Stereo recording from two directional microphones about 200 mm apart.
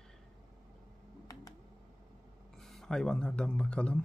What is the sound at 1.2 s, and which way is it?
Computer keyboard, 20° left (ahead or behind).